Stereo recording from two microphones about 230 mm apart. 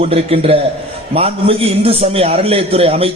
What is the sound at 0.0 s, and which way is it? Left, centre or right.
A man's voice, right.